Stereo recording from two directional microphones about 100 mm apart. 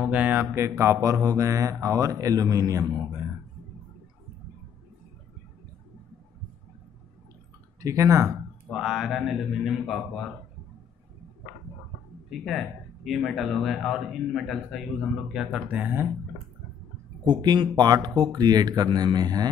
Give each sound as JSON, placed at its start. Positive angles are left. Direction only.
{"t": 0.0, "sound": "speech", "side_deg": -15}
{"t": 0.6, "sound": "speech", "side_deg": -30}
{"t": 7.8, "sound": "speech", "side_deg": -30}
{"t": 8.6, "sound": "speech", "side_deg": -5}
{"t": 12.3, "sound": "speech", "side_deg": 0}
{"t": 15.8, "sound": "speech", "side_deg": -15}
{"t": 17.2, "sound": "speech", "side_deg": -45}